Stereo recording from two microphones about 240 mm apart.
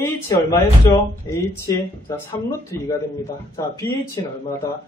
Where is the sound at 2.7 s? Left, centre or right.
Centre.